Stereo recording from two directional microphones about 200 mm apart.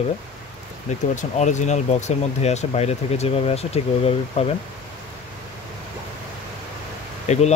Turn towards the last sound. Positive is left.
turn(degrees=35)  # may be behind; listen again after turning